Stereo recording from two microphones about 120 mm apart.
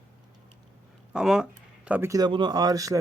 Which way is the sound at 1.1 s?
5° right (ahead or behind).